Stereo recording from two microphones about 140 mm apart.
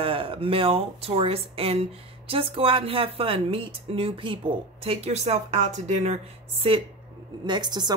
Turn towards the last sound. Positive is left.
turn(degrees=-30)  # may be behind; listen again after turning